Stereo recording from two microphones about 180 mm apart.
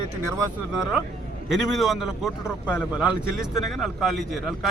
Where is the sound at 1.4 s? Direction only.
Centre (ahead or behind).